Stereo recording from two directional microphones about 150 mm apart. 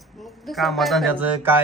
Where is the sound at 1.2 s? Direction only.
15° right (ahead or behind).